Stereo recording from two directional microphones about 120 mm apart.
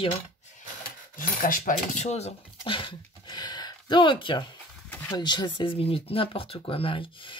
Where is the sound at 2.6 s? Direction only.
45° left (ahead or behind).